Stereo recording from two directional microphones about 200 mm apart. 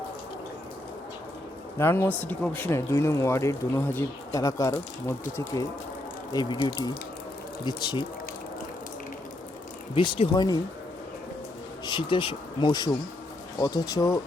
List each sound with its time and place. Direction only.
1.8 s speech: 10° left (ahead or behind)
9.9 s speech: 25° left (ahead or behind)
11.9 s speech: 25° left (ahead or behind)